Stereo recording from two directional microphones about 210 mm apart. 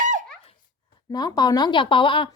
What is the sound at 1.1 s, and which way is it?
Speech, 20° left (ahead or behind).